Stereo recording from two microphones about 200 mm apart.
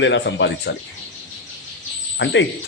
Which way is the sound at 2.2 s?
65° left (ahead or behind).